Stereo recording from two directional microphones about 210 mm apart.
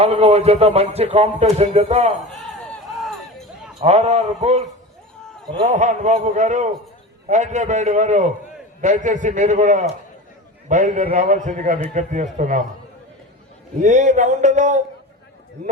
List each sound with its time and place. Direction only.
0.0 s speech: 30° right (ahead or behind)
2.4 s a sound: centre (ahead or behind)
3.8 s a man's voice: 30° right (ahead or behind)
5.6 s a man's voice: 35° right (ahead or behind)
13.7 s a man's voice: 35° right (ahead or behind)